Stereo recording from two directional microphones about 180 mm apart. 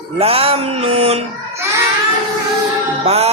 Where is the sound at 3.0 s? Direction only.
35° right (ahead or behind).